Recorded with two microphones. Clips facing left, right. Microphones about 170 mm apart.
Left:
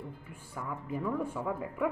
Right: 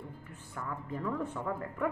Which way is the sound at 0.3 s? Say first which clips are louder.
Even; 10° left (ahead or behind).